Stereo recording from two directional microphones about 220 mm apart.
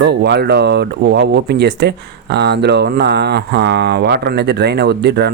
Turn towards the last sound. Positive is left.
turn(degrees=-50)  # may be behind; listen again after turning